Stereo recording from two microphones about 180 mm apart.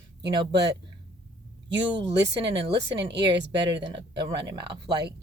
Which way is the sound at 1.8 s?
25° right (ahead or behind).